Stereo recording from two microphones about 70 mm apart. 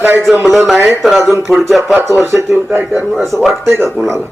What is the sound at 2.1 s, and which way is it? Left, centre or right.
Speech, right.